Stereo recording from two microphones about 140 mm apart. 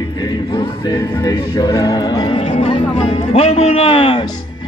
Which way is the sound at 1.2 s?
25° left (ahead or behind).